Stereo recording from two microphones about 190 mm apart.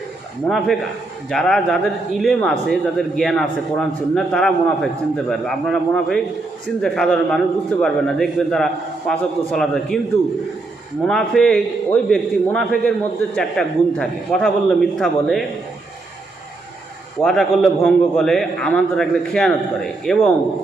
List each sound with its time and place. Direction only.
0.4 s a man's voice: centre (ahead or behind)
11.0 s a man's voice: 5° left (ahead or behind)
17.2 s a man's voice: centre (ahead or behind)